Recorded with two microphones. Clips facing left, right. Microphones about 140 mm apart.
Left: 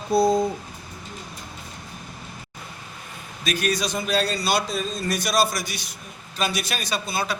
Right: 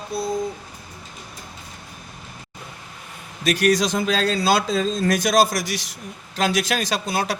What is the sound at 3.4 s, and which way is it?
A man's voice, 75° right (ahead or behind).